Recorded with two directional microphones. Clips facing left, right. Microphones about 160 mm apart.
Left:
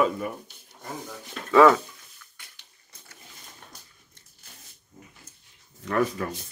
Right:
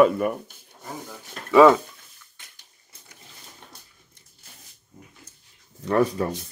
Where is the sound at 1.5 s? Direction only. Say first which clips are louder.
Right 3 dB; 15° right (ahead or behind).